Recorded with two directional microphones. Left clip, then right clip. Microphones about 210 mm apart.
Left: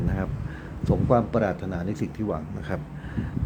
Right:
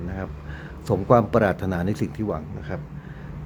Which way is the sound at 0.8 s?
20° right (ahead or behind).